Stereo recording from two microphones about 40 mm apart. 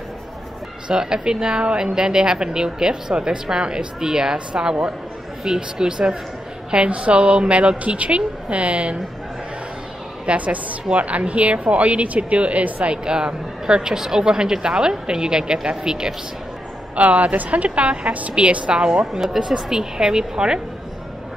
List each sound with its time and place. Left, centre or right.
0.8 s a woman's voice: centre
10.2 s a woman's voice: right
12.9 s speech: right
16.9 s a woman's voice: right; by 20.6 s centre